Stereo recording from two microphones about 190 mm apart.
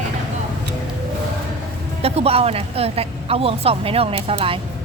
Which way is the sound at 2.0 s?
30° right (ahead or behind).